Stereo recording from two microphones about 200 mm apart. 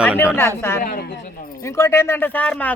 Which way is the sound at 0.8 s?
45° left (ahead or behind).